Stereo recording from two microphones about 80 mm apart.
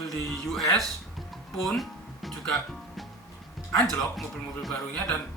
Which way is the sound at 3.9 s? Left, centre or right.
Centre.